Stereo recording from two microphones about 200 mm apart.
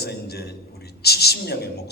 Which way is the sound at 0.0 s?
55° left (ahead or behind).